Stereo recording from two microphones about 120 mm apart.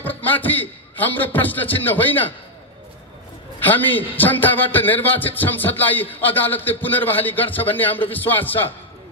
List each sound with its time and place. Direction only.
0.0 s a man's voice: 15° left (ahead or behind)
3.6 s a man's voice: 15° left (ahead or behind)